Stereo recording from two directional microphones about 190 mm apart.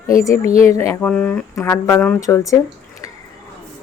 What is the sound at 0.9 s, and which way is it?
Speech, 10° left (ahead or behind).